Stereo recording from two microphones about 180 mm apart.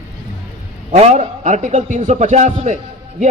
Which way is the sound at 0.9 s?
40° right (ahead or behind).